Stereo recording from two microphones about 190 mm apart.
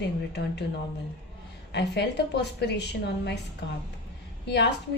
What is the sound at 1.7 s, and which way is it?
A woman's voice, 65° left (ahead or behind).